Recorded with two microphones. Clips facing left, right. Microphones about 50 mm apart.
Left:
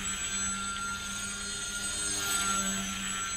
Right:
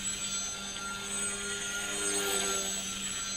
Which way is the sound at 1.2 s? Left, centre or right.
Right.